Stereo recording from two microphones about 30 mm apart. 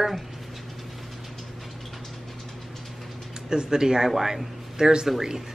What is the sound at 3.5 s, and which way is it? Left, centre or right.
A man's voice, right.